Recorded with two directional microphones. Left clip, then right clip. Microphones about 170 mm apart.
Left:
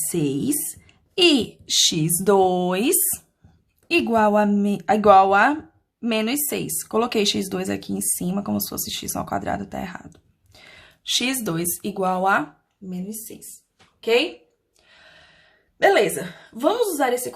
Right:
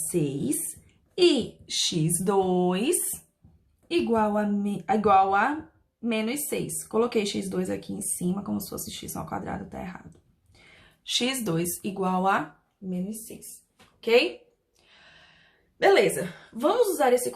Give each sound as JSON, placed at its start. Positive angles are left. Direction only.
{"t": 0.1, "sound": "speech", "side_deg": 45}
{"t": 14.0, "sound": "speech", "side_deg": 25}
{"t": 14.8, "sound": "a sound", "side_deg": 30}